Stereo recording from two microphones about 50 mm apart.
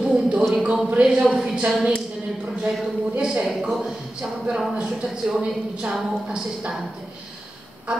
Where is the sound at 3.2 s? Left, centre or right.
Centre.